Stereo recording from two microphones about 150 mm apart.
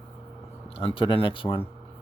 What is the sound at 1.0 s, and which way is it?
Speech, 35° left (ahead or behind).